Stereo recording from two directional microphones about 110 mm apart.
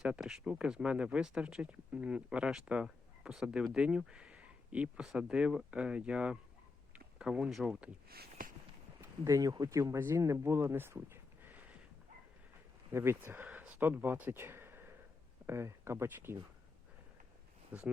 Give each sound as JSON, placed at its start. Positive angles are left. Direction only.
{"t": 0.0, "sound": "speech", "side_deg": -5}
{"t": 9.0, "sound": "speech", "side_deg": -30}
{"t": 12.9, "sound": "speech", "side_deg": -20}
{"t": 17.7, "sound": "speech", "side_deg": -15}